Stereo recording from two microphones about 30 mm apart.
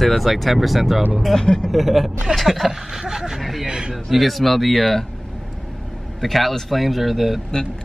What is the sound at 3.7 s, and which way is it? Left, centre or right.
Speech, right.